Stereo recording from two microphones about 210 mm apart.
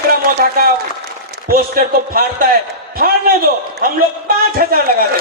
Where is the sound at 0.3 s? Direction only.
45° right (ahead or behind).